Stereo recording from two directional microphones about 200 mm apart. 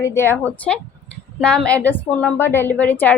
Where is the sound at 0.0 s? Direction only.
10° left (ahead or behind).